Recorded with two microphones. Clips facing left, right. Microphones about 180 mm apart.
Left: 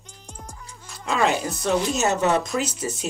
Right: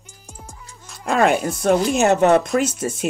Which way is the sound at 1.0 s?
55° right (ahead or behind).